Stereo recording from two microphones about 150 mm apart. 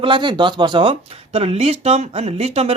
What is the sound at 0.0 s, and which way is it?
Speech, 30° right (ahead or behind).